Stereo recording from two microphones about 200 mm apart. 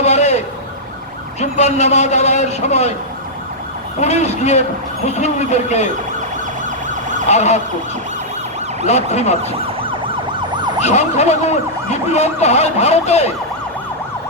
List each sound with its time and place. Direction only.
0.0 s emergency vehicle: 35° left (ahead or behind)
4.0 s emergency vehicle: 35° left (ahead or behind)
6.7 s emergency vehicle: 40° right (ahead or behind)
7.3 s emergency vehicle: 35° left (ahead or behind)
8.9 s emergency vehicle: 35° left (ahead or behind)
9.4 s ambulance: 30° right (ahead or behind)
10.8 s emergency vehicle: 35° left (ahead or behind)